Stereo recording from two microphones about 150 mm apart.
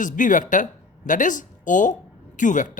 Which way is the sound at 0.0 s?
60° left (ahead or behind).